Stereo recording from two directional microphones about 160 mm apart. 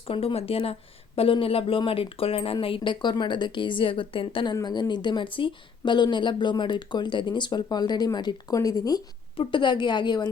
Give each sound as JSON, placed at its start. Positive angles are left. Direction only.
{"t": 0.1, "sound": "a woman's voice", "side_deg": 35}